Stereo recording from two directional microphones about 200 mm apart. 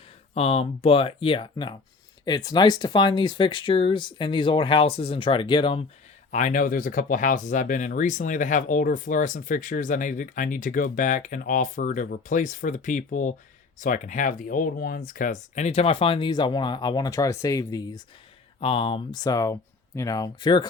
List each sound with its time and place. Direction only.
0.3 s speech: 30° left (ahead or behind)
6.3 s speech: 40° left (ahead or behind); by 20.7 s 20° left (ahead or behind)